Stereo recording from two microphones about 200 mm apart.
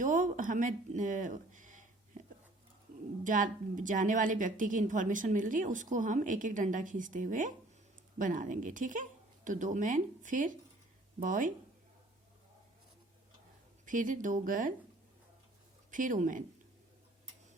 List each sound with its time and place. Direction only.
0.0 s speech: 40° right (ahead or behind)
3.2 s a woman's voice: 40° right (ahead or behind)
13.8 s a woman's voice: 40° right (ahead or behind)
15.9 s a woman's voice: 40° right (ahead or behind)